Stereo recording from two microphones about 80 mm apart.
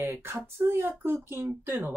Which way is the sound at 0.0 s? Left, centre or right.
Right.